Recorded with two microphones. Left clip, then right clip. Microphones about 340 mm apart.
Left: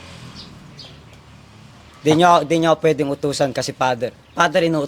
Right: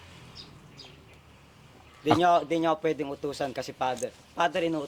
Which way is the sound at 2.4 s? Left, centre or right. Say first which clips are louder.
Left 10 dB; left.